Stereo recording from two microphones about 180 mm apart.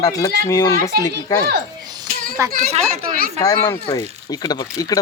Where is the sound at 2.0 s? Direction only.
50° right (ahead or behind).